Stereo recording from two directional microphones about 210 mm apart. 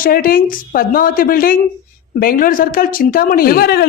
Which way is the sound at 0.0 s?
45° left (ahead or behind).